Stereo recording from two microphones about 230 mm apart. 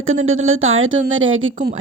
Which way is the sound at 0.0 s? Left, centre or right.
Right.